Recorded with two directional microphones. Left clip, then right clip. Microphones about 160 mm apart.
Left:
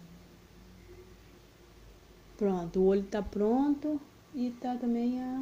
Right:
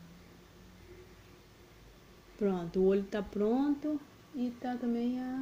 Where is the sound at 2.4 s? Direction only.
15° right (ahead or behind).